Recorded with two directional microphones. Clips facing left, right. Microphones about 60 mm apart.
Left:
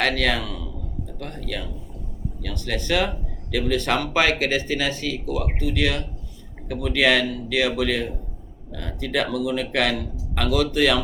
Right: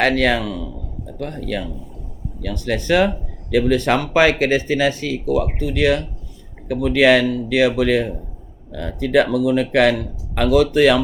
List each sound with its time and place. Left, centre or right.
0.0 s speech: right